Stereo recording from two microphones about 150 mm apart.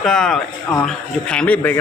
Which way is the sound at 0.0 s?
5° left (ahead or behind).